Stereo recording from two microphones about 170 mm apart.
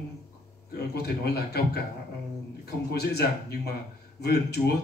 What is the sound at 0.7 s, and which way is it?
A man's voice, 70° left (ahead or behind).